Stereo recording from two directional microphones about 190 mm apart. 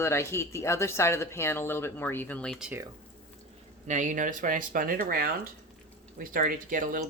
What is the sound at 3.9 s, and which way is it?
Speech, 40° right (ahead or behind).